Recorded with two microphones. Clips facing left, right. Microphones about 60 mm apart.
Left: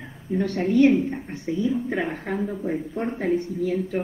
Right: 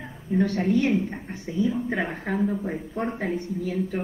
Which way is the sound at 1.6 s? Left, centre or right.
Centre.